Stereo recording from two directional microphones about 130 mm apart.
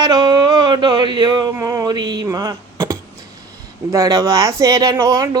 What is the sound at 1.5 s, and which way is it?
Speech, 25° right (ahead or behind).